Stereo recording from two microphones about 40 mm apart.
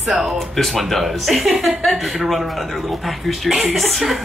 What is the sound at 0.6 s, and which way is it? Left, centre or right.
A man's voice, centre.